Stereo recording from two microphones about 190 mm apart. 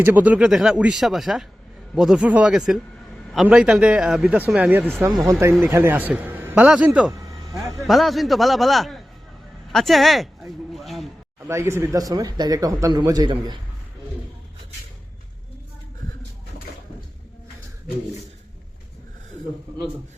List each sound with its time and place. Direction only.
0.0 s a man's voice: 10° right (ahead or behind)
7.1 s a sound: 20° right (ahead or behind)
7.8 s a man's voice: centre (ahead or behind)
11.4 s speech: 15° right (ahead or behind)